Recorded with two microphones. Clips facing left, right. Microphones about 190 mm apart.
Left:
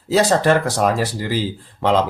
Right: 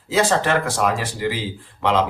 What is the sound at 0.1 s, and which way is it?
Speech, 40° left (ahead or behind).